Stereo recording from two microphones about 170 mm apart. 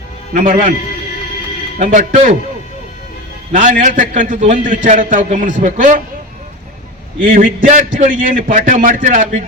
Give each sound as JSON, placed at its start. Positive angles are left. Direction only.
{"t": 0.3, "sound": "a man's voice", "side_deg": -50}
{"t": 1.8, "sound": "a man's voice", "side_deg": -45}
{"t": 3.5, "sound": "a man's voice", "side_deg": -50}
{"t": 7.2, "sound": "a man's voice", "side_deg": -55}